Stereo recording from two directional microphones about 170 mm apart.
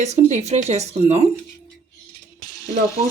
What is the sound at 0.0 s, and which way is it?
Speech, 40° right (ahead or behind).